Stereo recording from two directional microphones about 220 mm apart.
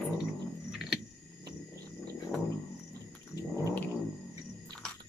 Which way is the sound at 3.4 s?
15° left (ahead or behind).